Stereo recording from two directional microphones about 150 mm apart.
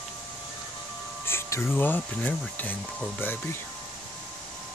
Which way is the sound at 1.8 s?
10° left (ahead or behind).